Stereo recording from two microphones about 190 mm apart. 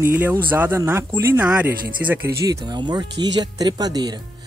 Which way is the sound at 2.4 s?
25° right (ahead or behind).